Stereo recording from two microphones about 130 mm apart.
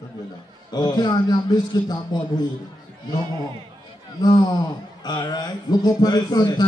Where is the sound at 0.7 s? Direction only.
35° left (ahead or behind).